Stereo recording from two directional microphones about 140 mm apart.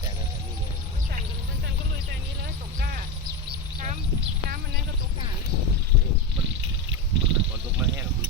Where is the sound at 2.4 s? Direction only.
90° right.